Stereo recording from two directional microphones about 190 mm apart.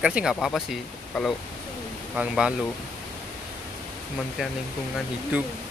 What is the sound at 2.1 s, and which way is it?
Speech, 5° right (ahead or behind).